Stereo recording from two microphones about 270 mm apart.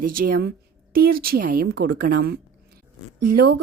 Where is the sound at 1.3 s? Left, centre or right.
Right.